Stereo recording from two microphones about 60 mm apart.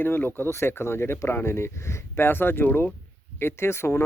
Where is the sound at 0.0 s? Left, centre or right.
Left.